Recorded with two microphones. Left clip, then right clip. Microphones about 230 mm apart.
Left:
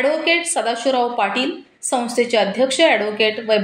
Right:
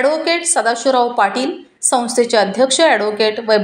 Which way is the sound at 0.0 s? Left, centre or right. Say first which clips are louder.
Right 2 dB; right.